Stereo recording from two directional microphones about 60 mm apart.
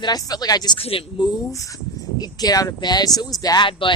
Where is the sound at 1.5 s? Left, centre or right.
Left.